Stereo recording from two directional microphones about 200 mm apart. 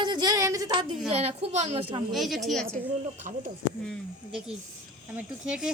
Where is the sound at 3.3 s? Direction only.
40° right (ahead or behind).